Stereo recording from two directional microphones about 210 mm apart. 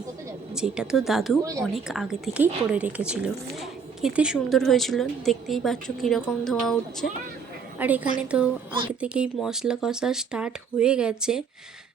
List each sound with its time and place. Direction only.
0.5 s a woman's voice: 5° right (ahead or behind)